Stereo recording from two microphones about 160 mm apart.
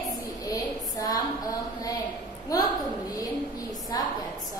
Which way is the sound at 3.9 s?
20° left (ahead or behind).